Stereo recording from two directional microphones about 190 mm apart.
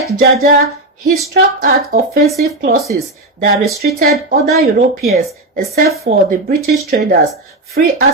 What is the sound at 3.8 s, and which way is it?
Speech, 50° right (ahead or behind).